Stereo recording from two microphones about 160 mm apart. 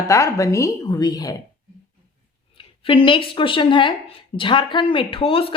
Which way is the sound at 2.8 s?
35° left (ahead or behind).